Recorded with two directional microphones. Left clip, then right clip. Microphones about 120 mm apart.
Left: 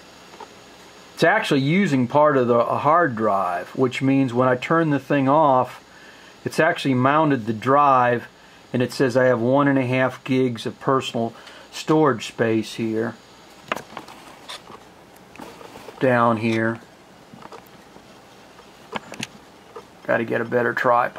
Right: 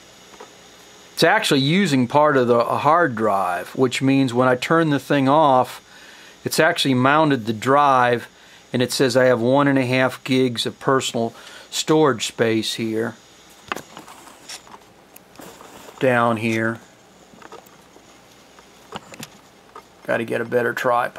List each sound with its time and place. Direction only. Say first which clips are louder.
1.1 s speech: right 2 dB; 45° right (ahead or behind)
12.5 s speech: right 2 dB; 25° right (ahead or behind)
16.0 s speech: even; 20° right (ahead or behind)
20.1 s speech: even; 25° right (ahead or behind)